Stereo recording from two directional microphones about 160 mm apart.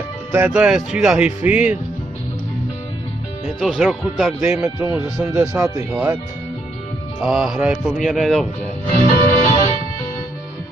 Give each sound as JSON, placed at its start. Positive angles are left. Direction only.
{"t": 0.3, "sound": "speech", "side_deg": -10}
{"t": 3.4, "sound": "speech", "side_deg": 0}
{"t": 7.2, "sound": "speech", "side_deg": -5}
{"t": 9.3, "sound": "music", "side_deg": 15}